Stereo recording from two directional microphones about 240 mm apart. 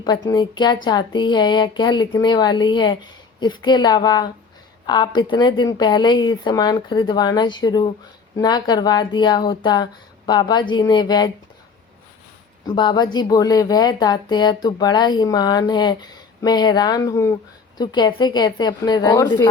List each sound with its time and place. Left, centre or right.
0.3 s speech: centre
12.6 s speech: centre